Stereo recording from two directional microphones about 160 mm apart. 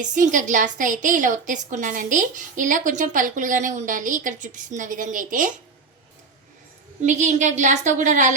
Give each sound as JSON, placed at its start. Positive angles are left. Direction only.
{"t": 0.0, "sound": "a woman's voice", "side_deg": -50}
{"t": 7.0, "sound": "a woman's voice", "side_deg": -50}